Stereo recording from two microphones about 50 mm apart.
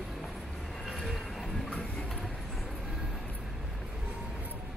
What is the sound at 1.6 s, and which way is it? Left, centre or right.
Train, left.